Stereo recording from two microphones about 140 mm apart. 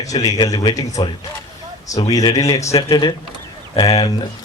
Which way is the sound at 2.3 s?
25° left (ahead or behind).